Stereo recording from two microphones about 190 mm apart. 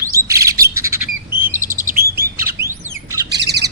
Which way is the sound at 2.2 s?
15° right (ahead or behind).